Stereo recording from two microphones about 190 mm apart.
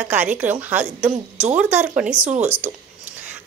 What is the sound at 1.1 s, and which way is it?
Speech, 35° right (ahead or behind).